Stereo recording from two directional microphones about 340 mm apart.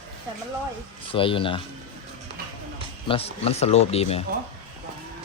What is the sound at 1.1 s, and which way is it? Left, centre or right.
Speech, centre.